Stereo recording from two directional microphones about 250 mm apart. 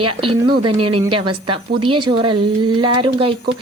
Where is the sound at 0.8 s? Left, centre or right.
Right.